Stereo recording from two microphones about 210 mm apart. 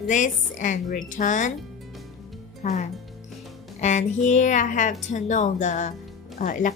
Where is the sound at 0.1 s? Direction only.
35° left (ahead or behind).